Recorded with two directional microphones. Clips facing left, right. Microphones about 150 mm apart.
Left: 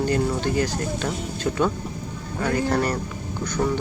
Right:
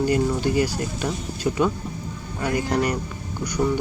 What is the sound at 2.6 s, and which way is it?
Speech, 15° right (ahead or behind).